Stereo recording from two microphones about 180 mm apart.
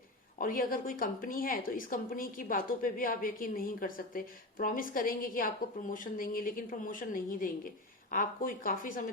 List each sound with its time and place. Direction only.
0.3 s a woman's voice: 50° left (ahead or behind)